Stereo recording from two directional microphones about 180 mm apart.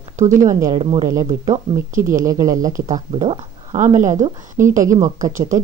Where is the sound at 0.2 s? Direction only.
15° right (ahead or behind).